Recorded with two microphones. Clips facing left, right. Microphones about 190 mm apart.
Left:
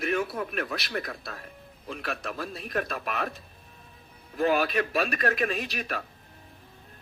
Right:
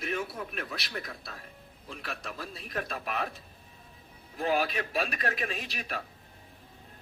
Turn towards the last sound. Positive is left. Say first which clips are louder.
# left 5 dB
turn(degrees=55)  # may be behind; listen again after turning